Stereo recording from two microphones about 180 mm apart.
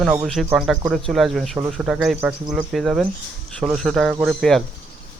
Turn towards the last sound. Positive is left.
turn(degrees=0)  # may be behind; listen again after turning